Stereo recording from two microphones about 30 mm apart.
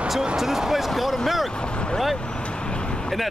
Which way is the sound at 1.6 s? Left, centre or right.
Left.